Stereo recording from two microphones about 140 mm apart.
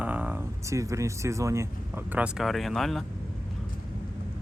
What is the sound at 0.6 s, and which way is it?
Speech, 20° right (ahead or behind).